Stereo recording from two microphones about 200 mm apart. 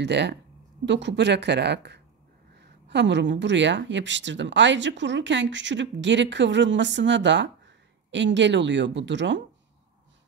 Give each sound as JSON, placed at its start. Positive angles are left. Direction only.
{"t": 0.0, "sound": "speech", "side_deg": -60}